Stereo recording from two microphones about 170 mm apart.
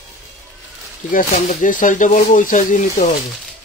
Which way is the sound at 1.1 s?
50° left (ahead or behind).